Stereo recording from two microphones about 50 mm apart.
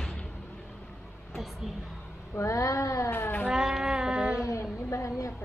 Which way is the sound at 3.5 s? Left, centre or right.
Centre.